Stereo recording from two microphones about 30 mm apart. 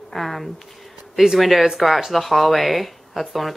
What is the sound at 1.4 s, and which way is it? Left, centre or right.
Speech, centre.